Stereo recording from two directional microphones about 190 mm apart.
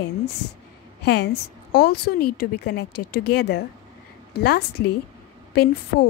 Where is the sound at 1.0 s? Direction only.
60° left (ahead or behind).